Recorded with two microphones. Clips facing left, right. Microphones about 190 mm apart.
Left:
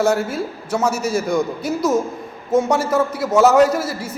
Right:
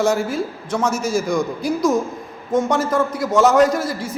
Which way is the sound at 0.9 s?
65° left (ahead or behind).